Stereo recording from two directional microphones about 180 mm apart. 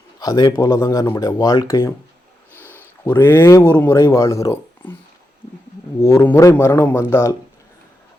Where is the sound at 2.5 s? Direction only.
10° right (ahead or behind).